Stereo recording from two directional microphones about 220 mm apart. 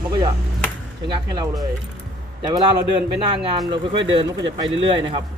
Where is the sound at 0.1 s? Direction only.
20° right (ahead or behind).